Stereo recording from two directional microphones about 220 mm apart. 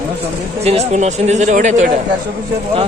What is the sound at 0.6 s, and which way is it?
A man's voice, 30° right (ahead or behind).